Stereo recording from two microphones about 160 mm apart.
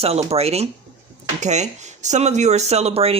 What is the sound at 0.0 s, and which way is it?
Speech, 40° right (ahead or behind).